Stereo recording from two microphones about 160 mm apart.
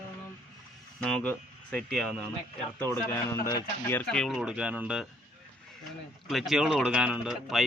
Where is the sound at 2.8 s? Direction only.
15° left (ahead or behind); by 5.1 s 5° right (ahead or behind).